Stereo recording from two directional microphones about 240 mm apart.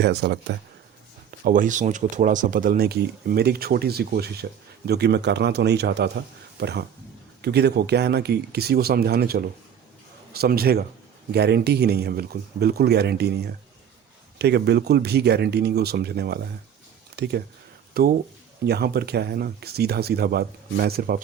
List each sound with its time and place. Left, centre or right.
0.0 s speech: right
1.5 s speech: right